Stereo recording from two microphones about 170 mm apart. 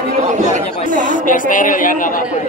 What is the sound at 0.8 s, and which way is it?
Speech, 50° left (ahead or behind).